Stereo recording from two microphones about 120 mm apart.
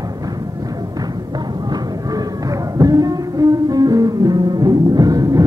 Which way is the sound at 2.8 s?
30° right (ahead or behind).